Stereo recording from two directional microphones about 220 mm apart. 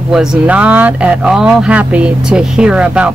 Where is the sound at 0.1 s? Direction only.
5° right (ahead or behind).